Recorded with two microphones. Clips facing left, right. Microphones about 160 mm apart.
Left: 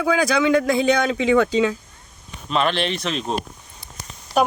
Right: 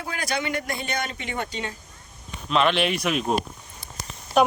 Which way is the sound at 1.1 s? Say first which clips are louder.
Left 14 dB; 90° left.